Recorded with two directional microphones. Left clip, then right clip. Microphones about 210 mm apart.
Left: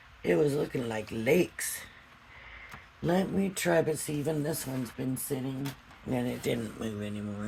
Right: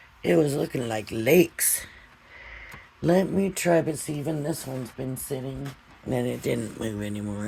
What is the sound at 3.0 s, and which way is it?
Speech, 40° right (ahead or behind).